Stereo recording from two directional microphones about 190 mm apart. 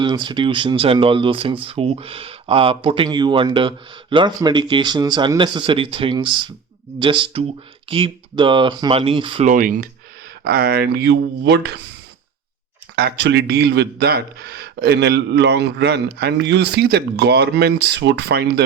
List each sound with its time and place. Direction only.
0.0 s speech: 25° right (ahead or behind)
9.5 s a man's voice: 45° right (ahead or behind); by 11.8 s 65° right (ahead or behind)
13.0 s a man's voice: 65° right (ahead or behind)